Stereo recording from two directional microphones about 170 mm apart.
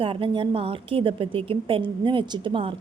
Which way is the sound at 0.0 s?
30° right (ahead or behind).